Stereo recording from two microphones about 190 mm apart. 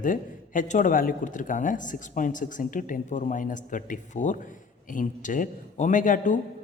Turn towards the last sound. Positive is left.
turn(degrees=45)  # may be behind; listen again after turning